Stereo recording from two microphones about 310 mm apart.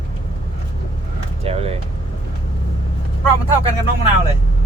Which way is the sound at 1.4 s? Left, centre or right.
Centre.